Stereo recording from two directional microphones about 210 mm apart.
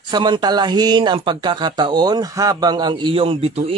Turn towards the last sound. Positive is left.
turn(degrees=-25)  # may be behind; listen again after turning